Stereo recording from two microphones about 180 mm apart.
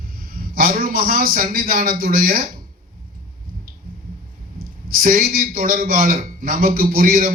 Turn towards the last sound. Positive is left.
turn(degrees=-55)  # may be behind; listen again after turning